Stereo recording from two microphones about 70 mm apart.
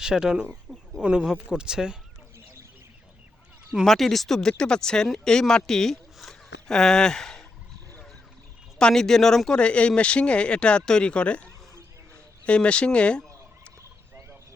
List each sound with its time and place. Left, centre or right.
0.0 s speech: centre
0.7 s chicken: centre
1.0 s speech: centre
3.8 s speech: centre
8.8 s speech: centre
12.5 s frog: centre